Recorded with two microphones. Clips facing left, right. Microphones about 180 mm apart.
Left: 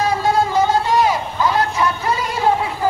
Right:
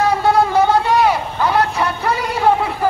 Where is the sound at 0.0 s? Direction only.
65° right (ahead or behind).